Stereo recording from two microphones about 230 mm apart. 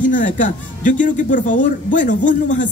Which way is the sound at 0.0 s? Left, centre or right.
Left.